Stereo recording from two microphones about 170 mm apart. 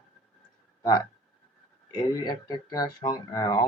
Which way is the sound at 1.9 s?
25° left (ahead or behind).